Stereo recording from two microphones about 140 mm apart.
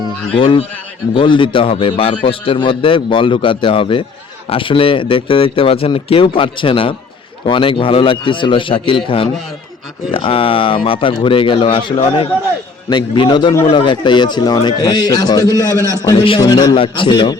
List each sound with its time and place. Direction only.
0.3 s a man's voice: 40° left (ahead or behind)
16.7 s speech: 40° left (ahead or behind)